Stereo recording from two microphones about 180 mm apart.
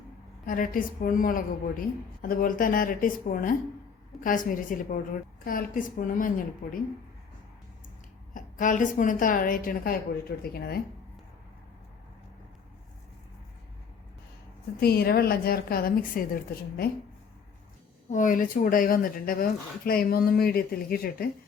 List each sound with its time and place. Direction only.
0.4 s speech: 50° left (ahead or behind)
8.3 s a woman's voice: 50° left (ahead or behind)
14.8 s a woman's voice: 60° left (ahead or behind)
18.1 s speech: 45° left (ahead or behind)